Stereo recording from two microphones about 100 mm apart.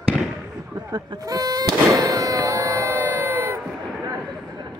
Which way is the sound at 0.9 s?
40° right (ahead or behind).